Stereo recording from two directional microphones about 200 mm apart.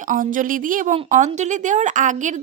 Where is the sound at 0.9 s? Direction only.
30° right (ahead or behind).